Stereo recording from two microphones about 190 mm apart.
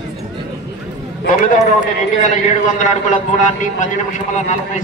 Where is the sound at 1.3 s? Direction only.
45° left (ahead or behind).